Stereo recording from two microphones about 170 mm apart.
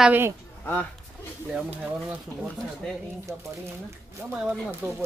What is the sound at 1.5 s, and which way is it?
Speech, 10° right (ahead or behind).